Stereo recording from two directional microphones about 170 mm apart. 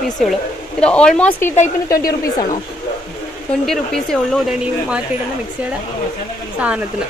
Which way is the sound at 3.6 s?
Centre (ahead or behind).